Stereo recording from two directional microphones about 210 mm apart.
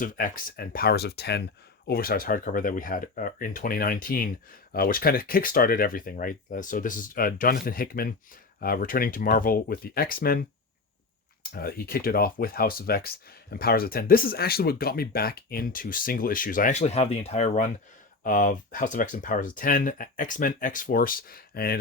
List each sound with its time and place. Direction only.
0.0 s speech: 40° left (ahead or behind)
11.5 s speech: 45° left (ahead or behind)